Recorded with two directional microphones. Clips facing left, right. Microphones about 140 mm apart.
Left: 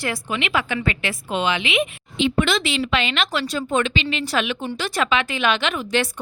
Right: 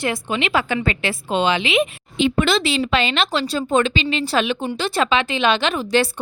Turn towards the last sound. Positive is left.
turn(degrees=-35)  # may be behind; listen again after turning